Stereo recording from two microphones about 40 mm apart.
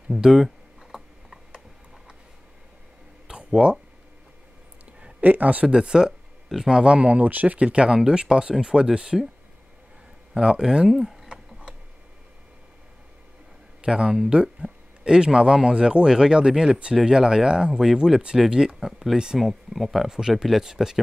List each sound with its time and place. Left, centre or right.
0.2 s speech: centre
3.3 s a sound: right
5.2 s speech: right
5.7 s speech: centre
6.8 s speech: right
10.3 s speech: centre
13.7 s speech: centre
19.3 s speech: centre
20.1 s speech: centre